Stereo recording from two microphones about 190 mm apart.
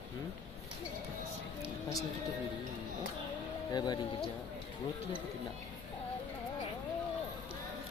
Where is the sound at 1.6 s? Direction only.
15° left (ahead or behind).